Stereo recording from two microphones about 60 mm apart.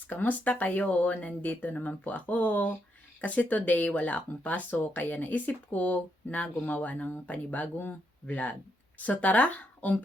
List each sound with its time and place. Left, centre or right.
0.1 s speech: left